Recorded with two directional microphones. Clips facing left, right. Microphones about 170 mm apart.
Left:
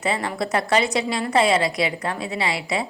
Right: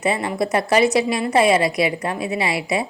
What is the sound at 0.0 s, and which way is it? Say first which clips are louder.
A woman's voice: right 3 dB; 20° right (ahead or behind).